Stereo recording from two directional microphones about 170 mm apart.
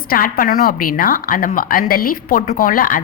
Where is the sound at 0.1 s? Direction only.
55° left (ahead or behind).